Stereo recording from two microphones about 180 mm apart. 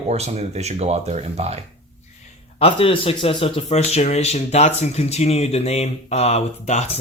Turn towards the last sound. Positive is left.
turn(degrees=40)  # may be behind; listen again after turning